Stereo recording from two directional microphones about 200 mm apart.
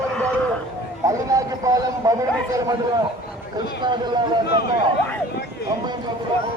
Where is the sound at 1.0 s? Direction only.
15° right (ahead or behind).